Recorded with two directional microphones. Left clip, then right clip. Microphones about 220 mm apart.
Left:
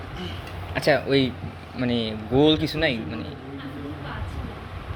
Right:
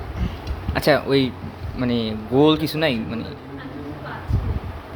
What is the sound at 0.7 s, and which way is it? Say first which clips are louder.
A man's voice: right 3 dB; 20° right (ahead or behind).